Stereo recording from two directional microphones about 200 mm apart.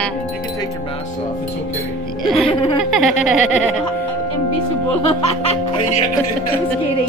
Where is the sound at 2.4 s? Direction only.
25° left (ahead or behind).